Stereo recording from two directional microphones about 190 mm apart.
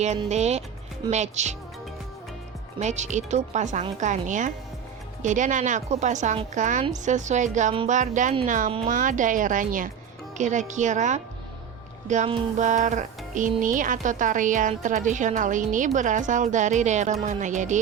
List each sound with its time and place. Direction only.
0.3 s a woman's voice: 35° right (ahead or behind)
2.7 s a woman's voice: 35° right (ahead or behind)